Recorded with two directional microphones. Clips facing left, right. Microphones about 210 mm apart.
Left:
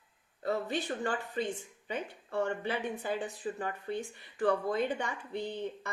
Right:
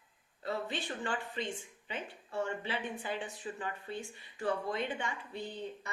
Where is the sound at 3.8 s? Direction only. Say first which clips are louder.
Left 5 dB; 50° left (ahead or behind).